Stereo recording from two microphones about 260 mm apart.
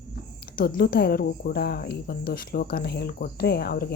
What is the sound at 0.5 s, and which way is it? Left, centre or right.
Speech, left.